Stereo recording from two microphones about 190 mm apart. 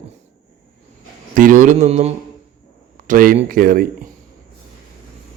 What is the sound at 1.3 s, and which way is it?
Speech, 45° right (ahead or behind).